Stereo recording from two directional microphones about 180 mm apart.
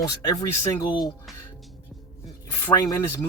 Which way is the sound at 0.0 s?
20° left (ahead or behind).